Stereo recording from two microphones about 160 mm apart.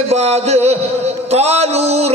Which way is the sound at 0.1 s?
40° right (ahead or behind).